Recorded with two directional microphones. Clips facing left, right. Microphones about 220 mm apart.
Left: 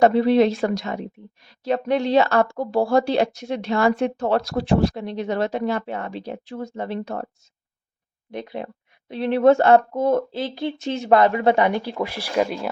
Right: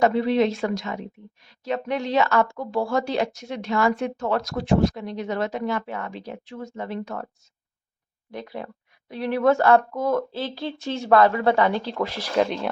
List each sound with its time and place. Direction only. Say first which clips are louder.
0.0 s speech: left 4 dB; 35° left (ahead or behind)
8.3 s speech: left 3 dB; 20° left (ahead or behind)